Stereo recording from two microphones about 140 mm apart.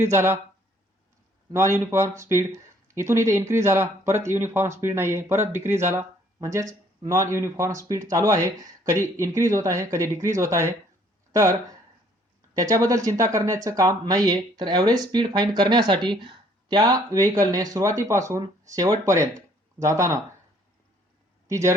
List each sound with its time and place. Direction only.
0.0 s speech: 20° right (ahead or behind)
1.5 s speech: 20° right (ahead or behind)
12.5 s speech: 25° right (ahead or behind)
21.4 s speech: 20° right (ahead or behind)